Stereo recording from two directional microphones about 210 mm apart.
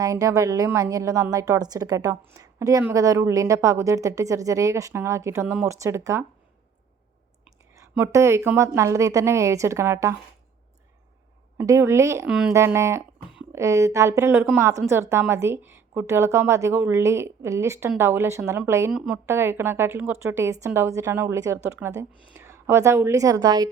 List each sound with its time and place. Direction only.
0.0 s a woman's voice: 15° right (ahead or behind)
7.8 s a woman's voice: 10° right (ahead or behind)
11.5 s a woman's voice: 15° right (ahead or behind)
12.3 s a woman's voice: 5° right (ahead or behind)
18.9 s a woman's voice: 5° right (ahead or behind)